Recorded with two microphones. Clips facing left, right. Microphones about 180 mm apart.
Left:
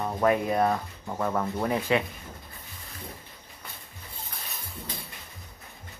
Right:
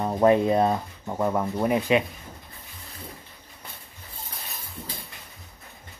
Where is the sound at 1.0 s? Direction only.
15° right (ahead or behind).